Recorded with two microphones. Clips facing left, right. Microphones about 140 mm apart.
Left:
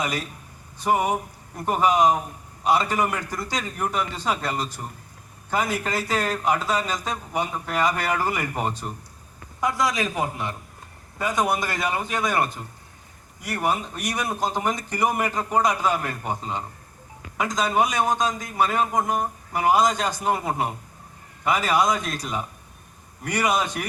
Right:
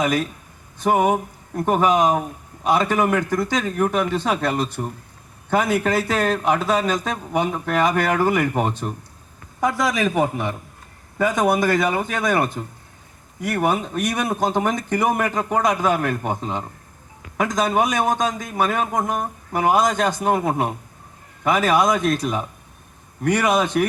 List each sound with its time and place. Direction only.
0.0 s a man's voice: 55° right (ahead or behind)